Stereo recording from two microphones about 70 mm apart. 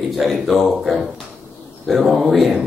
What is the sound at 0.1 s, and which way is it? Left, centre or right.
Speech, centre.